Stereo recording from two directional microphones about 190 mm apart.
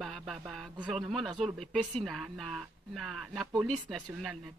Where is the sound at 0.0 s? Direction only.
Centre (ahead or behind).